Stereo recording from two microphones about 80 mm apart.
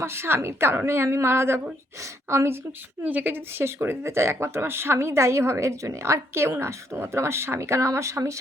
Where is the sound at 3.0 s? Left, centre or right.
Right.